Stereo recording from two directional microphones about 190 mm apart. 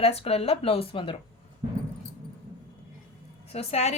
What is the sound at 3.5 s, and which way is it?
Speech, 30° left (ahead or behind).